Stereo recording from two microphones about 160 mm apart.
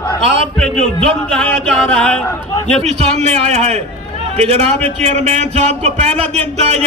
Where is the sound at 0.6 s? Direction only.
5° left (ahead or behind).